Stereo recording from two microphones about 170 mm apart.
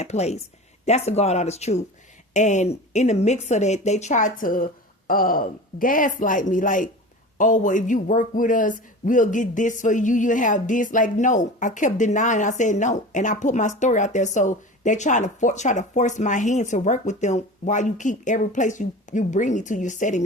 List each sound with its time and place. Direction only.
0.0 s speech: 40° left (ahead or behind)